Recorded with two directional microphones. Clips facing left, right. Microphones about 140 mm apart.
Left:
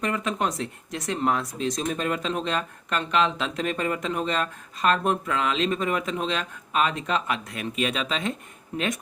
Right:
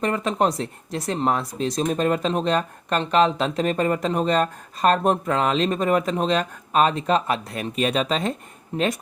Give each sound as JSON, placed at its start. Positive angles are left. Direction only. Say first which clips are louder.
{"t": 0.0, "sound": "speech", "louder": "right 5 dB", "side_deg": -35}